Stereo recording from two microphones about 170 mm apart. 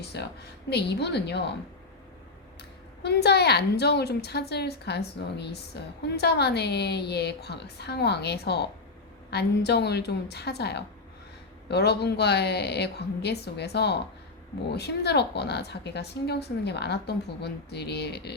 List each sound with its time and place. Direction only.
0.0 s a sound: 80° left
0.7 s a woman's voice: 80° left
3.0 s a woman's voice: 75° left (ahead or behind)